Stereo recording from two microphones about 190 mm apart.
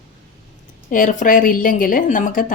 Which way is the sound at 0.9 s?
45° left (ahead or behind).